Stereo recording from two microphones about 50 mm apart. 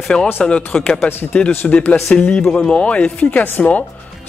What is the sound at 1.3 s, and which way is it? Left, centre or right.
Speech, left.